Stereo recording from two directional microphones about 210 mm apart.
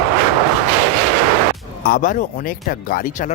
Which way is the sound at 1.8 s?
40° left (ahead or behind).